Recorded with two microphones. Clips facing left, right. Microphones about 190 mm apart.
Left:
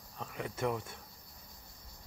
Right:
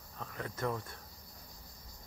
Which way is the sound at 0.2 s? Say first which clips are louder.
Left 2 dB; 15° left (ahead or behind).